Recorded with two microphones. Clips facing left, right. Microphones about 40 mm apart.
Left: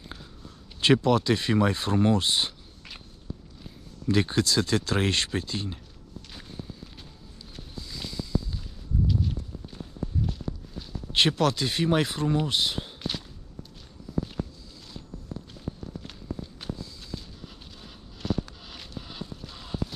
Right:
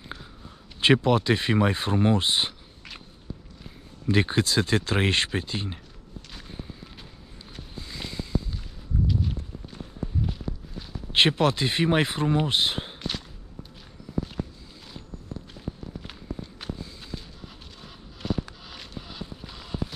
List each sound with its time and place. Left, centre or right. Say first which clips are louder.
0.7 s speech: right 1 dB; right
4.0 s speech: right 1 dB; right
7.7 s boat: right 1 dB; right
9.0 s walk: even; centre
11.1 s speech: right 2 dB; right
16.1 s walk: even; centre
18.2 s a sound: even; centre